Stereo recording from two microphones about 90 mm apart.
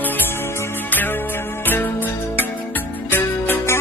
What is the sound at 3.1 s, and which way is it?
Music, 20° left (ahead or behind).